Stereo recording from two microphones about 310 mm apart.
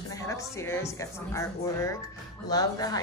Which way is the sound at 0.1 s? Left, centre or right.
Centre.